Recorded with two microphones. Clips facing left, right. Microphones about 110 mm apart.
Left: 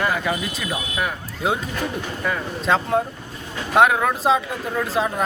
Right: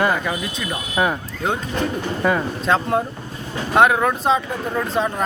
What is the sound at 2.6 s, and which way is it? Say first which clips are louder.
Speech: even; centre (ahead or behind).